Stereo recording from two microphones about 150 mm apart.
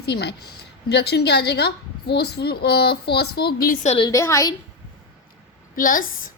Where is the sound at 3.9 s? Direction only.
30° left (ahead or behind).